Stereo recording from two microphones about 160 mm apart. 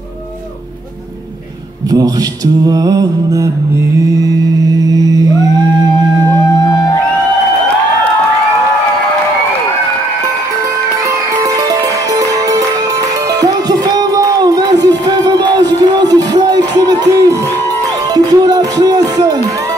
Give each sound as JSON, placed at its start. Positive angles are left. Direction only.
{"t": 1.9, "sound": "mantra", "side_deg": -25}
{"t": 12.2, "sound": "music", "side_deg": -20}